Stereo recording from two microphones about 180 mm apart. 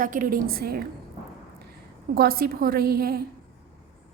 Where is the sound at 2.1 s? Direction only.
55° right (ahead or behind).